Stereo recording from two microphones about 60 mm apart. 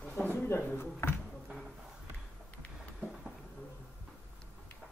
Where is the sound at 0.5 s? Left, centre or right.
Left.